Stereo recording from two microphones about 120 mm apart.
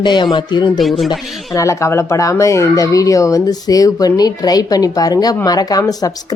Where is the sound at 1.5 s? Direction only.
25° left (ahead or behind).